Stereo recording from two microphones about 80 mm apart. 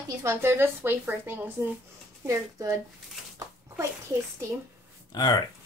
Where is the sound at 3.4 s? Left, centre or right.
Right.